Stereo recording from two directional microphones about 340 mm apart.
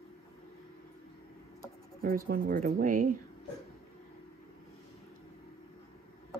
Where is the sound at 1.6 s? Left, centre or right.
Right.